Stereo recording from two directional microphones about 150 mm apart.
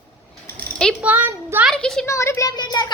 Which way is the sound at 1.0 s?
10° right (ahead or behind).